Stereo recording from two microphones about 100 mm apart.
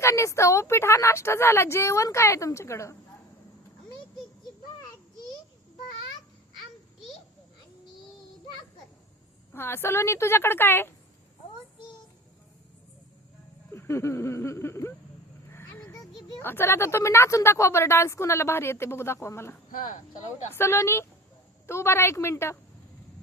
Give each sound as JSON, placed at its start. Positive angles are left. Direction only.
{"t": 0.0, "sound": "a woman's voice", "side_deg": 30}
{"t": 9.5, "sound": "a woman's voice", "side_deg": 25}
{"t": 13.7, "sound": "a woman's voice", "side_deg": 25}
{"t": 16.4, "sound": "a woman's voice", "side_deg": 25}